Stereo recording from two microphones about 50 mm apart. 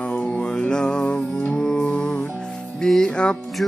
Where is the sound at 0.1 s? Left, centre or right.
Left.